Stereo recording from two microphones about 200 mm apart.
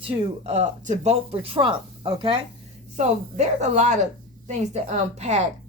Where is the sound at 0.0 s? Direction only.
30° right (ahead or behind).